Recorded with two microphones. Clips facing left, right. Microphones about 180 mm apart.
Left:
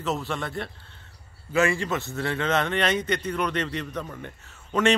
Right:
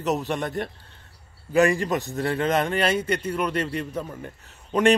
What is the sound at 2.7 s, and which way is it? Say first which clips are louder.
A man's voice: right 2 dB; 10° right (ahead or behind).